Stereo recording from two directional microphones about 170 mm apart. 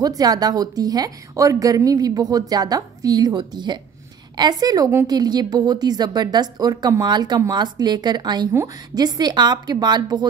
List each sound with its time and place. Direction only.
0.0 s a woman's voice: 20° right (ahead or behind)